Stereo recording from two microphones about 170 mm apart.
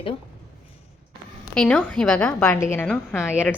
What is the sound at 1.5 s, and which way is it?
A woman's voice, 5° left (ahead or behind).